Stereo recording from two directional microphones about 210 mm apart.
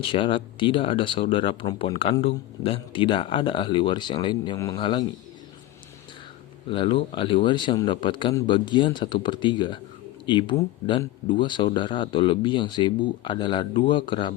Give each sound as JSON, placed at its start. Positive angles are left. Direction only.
{"t": 0.0, "sound": "speech", "side_deg": 25}
{"t": 6.7, "sound": "speech", "side_deg": 25}